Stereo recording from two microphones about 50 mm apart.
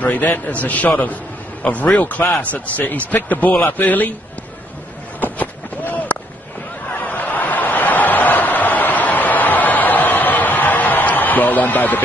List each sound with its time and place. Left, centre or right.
0.0 s a man's voice: left
5.2 s run: left
7.1 s a sound: left